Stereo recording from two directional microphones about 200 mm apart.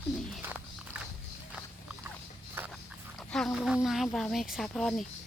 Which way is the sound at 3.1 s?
Centre (ahead or behind).